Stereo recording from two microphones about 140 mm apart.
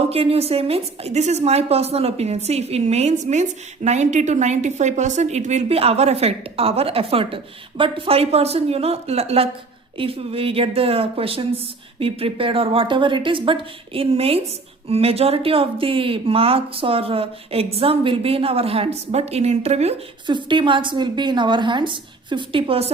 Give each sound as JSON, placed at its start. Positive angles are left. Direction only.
{"t": 0.1, "sound": "a woman's voice", "side_deg": -45}
{"t": 20.2, "sound": "a woman's voice", "side_deg": -35}